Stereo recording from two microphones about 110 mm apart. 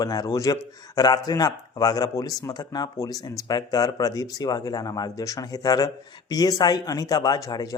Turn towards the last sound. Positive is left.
turn(degrees=35)  # may be behind; listen again after turning